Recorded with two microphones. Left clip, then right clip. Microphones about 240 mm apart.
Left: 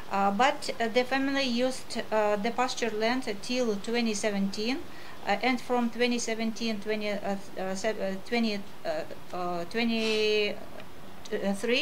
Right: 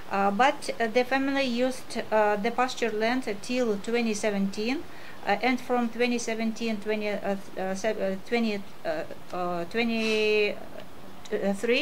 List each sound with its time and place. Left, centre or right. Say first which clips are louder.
0.1 s a woman's voice: right 2 dB; right